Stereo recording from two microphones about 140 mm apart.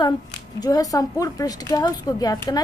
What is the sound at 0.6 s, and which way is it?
A woman's voice, 25° left (ahead or behind).